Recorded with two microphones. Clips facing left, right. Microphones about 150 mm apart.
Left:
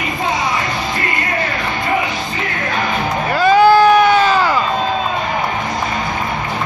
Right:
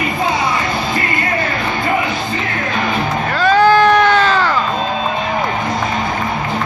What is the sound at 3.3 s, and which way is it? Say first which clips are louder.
Crowd: left 1 dB; 10° left (ahead or behind).